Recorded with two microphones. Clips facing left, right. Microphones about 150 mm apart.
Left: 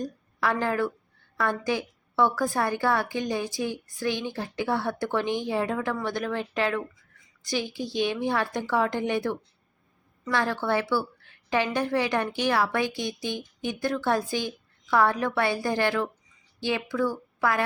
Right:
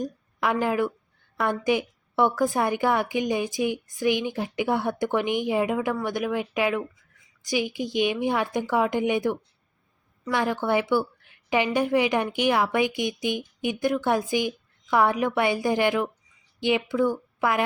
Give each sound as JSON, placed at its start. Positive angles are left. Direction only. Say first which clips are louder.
{"t": 0.0, "sound": "a woman's voice", "louder": "right 1 dB", "side_deg": -15}